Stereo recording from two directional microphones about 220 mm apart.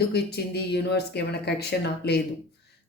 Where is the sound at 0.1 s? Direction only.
45° left (ahead or behind).